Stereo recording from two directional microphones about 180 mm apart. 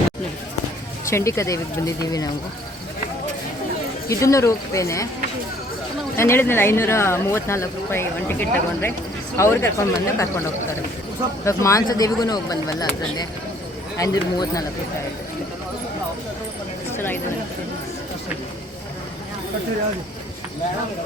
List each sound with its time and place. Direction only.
1.1 s speech: 15° left (ahead or behind)
4.1 s speech: 15° left (ahead or behind)
6.1 s speech: 15° left (ahead or behind)
11.4 s speech: 15° left (ahead or behind)